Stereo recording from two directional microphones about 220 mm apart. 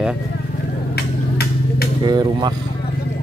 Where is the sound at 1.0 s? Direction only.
50° left (ahead or behind).